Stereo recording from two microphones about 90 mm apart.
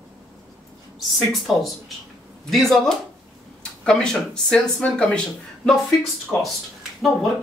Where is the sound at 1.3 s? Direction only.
Centre (ahead or behind).